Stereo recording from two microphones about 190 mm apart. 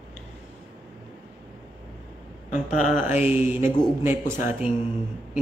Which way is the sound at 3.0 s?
10° right (ahead or behind).